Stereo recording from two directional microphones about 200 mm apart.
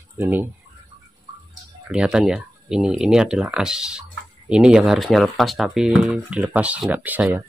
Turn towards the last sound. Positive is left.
turn(degrees=-10)  # may be behind; listen again after turning